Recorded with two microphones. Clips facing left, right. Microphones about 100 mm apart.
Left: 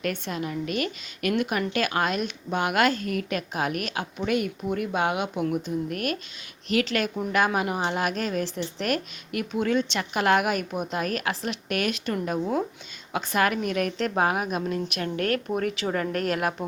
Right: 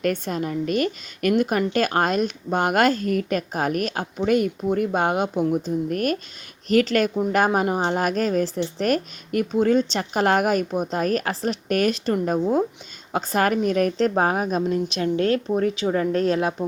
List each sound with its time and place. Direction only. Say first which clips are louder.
0.0 s a woman's voice: right 5 dB; 40° right (ahead or behind); by 16.6 s 25° right (ahead or behind)